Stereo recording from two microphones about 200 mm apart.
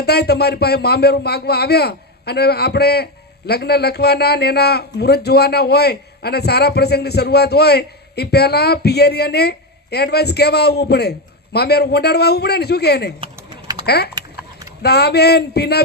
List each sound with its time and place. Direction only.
0.0 s speech: 55° left (ahead or behind)
13.5 s typing: 25° right (ahead or behind)
13.8 s speech: 55° left (ahead or behind)
14.8 s a sound: 55° left (ahead or behind)